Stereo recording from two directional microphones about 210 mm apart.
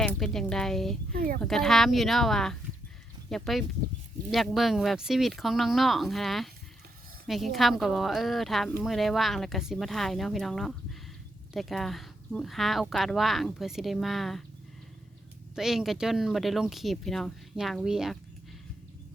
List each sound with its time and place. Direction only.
0.0 s speech: 5° left (ahead or behind)
1.1 s speech: 45° right (ahead or behind)
1.4 s speech: centre (ahead or behind)
15.5 s speech: centre (ahead or behind)